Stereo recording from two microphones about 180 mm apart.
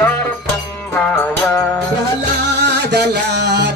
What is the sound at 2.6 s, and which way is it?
Music, 70° right (ahead or behind).